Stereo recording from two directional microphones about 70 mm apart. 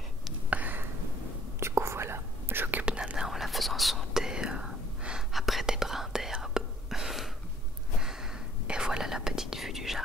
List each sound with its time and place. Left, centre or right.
0.5 s a sound: right
1.6 s whispering: right
2.8 s whispering: centre
8.6 s whispering: centre